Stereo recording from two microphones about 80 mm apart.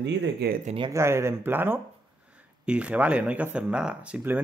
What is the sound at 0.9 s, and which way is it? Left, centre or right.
Speech, right.